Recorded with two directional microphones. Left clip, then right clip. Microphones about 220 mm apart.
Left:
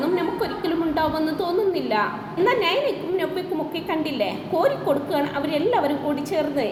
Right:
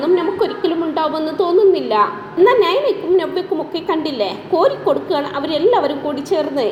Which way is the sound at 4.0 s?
15° right (ahead or behind).